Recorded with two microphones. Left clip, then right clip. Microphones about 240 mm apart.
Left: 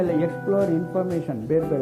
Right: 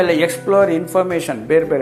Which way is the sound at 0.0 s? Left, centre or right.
Centre.